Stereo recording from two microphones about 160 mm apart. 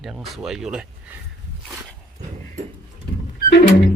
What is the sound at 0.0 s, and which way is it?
Speech, centre (ahead or behind).